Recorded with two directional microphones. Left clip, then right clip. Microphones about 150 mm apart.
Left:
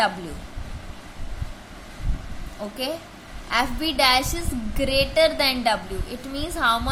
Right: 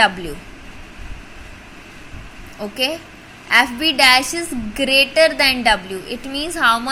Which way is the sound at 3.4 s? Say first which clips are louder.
Right 9 dB; 20° right (ahead or behind).